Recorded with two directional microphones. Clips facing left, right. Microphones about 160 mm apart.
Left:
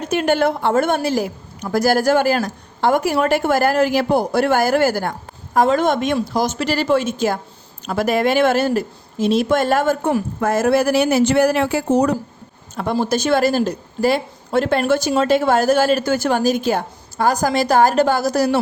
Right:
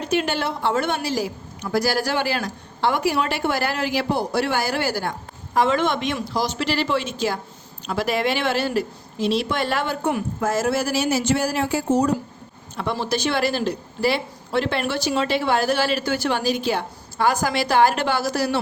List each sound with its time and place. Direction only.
0.0 s a woman's voice: 50° left (ahead or behind)
10.4 s speech: 55° left (ahead or behind)
12.7 s a woman's voice: 45° left (ahead or behind)